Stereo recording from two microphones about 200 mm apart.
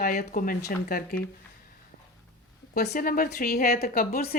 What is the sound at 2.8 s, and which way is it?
A woman's voice, 45° left (ahead or behind).